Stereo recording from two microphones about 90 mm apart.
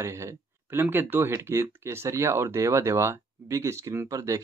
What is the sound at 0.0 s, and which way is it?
Speech, 30° right (ahead or behind).